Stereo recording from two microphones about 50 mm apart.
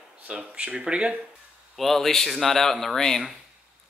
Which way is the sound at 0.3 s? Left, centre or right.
Right.